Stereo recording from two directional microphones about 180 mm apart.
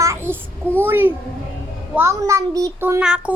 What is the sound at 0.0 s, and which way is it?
Child singing, 15° right (ahead or behind).